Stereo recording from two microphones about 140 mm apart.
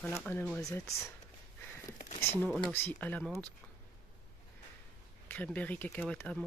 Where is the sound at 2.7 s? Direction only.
15° left (ahead or behind).